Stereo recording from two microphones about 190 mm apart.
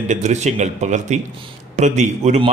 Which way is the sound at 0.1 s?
40° right (ahead or behind).